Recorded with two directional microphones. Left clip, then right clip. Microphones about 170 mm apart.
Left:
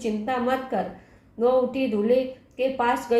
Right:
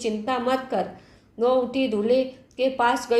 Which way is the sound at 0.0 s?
30° right (ahead or behind).